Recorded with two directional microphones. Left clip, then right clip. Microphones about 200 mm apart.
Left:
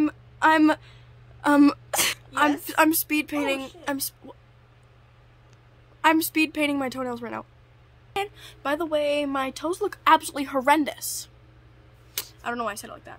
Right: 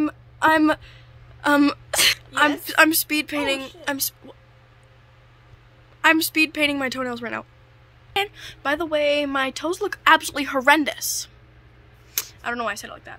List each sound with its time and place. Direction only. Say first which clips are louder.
0.0 s a sound: right 1 dB; 5° left (ahead or behind)
2.6 s speech: right 4 dB; 10° left (ahead or behind)
5.9 s speech: right 3 dB; 10° left (ahead or behind)